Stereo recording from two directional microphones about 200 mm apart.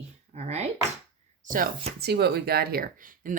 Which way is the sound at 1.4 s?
45° right (ahead or behind).